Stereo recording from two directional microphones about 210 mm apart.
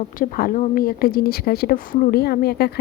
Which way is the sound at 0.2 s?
40° left (ahead or behind).